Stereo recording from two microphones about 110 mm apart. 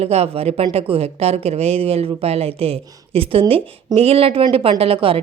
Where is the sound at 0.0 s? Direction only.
65° right (ahead or behind).